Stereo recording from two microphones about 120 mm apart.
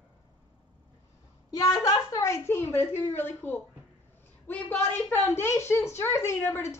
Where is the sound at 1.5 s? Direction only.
35° left (ahead or behind).